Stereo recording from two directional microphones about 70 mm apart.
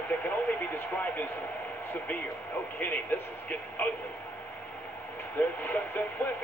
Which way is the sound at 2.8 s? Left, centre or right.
Left.